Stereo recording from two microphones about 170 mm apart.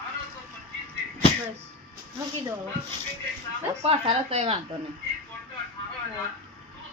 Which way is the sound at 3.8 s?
35° right (ahead or behind).